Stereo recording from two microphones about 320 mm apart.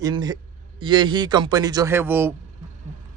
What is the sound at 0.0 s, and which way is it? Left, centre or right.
Speech, centre.